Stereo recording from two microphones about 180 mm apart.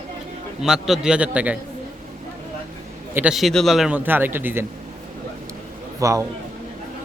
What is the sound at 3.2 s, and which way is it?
A man's voice, 5° right (ahead or behind).